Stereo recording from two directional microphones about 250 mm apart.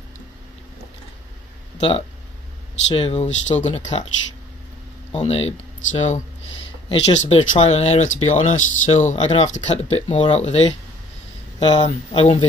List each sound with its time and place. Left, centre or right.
1.8 s speech: left
5.1 s speech: left